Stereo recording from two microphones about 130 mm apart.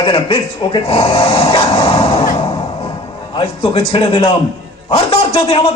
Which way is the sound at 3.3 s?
40° left (ahead or behind).